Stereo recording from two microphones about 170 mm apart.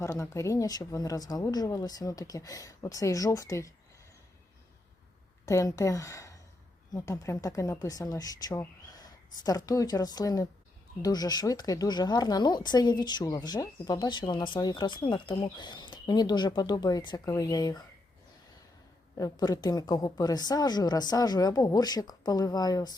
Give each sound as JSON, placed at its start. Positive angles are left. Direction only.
{"t": 0.0, "sound": "speech", "side_deg": 15}
{"t": 5.5, "sound": "a woman's voice", "side_deg": 20}
{"t": 19.1, "sound": "speech", "side_deg": 20}